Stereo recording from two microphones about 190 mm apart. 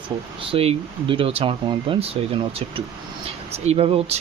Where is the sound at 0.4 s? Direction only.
30° right (ahead or behind).